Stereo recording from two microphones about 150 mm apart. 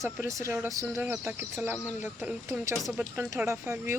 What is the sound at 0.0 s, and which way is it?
Speech, 20° right (ahead or behind).